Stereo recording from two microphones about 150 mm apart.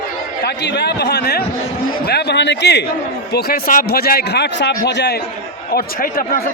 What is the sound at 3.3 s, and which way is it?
Speech, 80° left.